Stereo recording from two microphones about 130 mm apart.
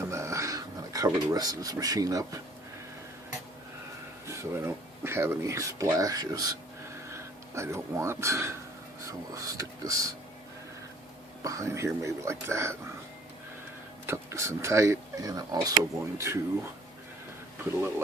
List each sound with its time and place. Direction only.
0.1 s a sound: 20° right (ahead or behind)
4.3 s speech: 20° right (ahead or behind)
11.4 s speech: 25° right (ahead or behind)
14.1 s speech: 20° right (ahead or behind)
17.6 s speech: 15° right (ahead or behind)